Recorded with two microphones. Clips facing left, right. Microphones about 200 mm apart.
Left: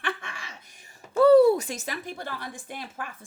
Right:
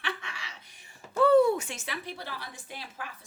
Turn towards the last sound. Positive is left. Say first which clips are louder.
# left 5 dB
turn(degrees=50)  # may be behind; listen again after turning